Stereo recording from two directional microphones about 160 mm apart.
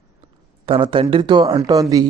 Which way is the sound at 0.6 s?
35° right (ahead or behind).